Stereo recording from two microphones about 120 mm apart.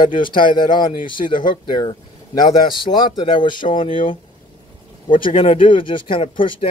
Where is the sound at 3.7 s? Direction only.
90° left.